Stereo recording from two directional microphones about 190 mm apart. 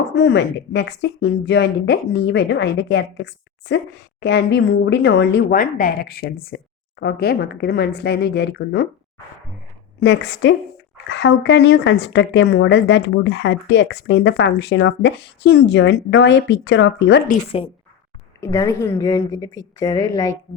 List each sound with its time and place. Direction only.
0.1 s speech: 70° left (ahead or behind)
5.5 s speech: 45° left (ahead or behind)
10.0 s a woman's voice: 70° left (ahead or behind)
18.3 s a woman's voice: 15° left (ahead or behind)